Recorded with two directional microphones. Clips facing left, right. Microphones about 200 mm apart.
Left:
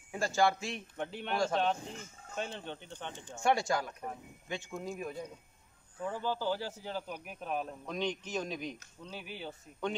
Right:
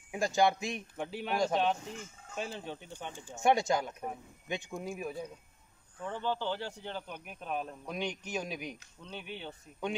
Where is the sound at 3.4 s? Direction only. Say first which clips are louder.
Right 2 dB; 20° right (ahead or behind).